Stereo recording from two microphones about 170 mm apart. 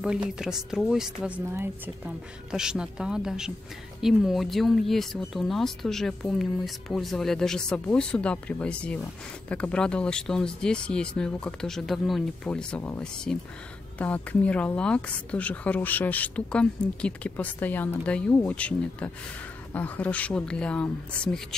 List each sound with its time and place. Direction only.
0.0 s a woman's voice: 5° right (ahead or behind)